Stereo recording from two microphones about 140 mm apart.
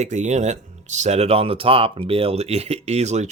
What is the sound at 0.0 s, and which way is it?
Speech, 55° right (ahead or behind).